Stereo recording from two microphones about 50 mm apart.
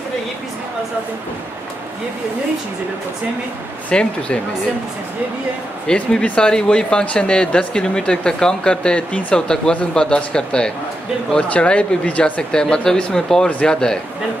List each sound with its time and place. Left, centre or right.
3.9 s speech: centre
5.9 s speech: centre